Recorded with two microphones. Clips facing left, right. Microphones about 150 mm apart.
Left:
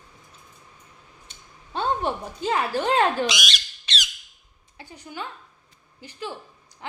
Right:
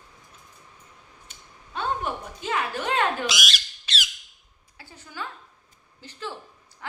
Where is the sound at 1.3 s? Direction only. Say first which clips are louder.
Left 4 dB; 30° left (ahead or behind).